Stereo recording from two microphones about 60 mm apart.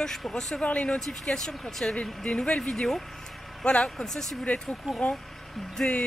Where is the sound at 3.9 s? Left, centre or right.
Centre.